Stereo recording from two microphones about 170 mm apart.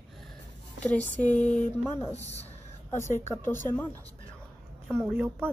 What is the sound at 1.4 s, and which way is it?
Speech, 45° left (ahead or behind).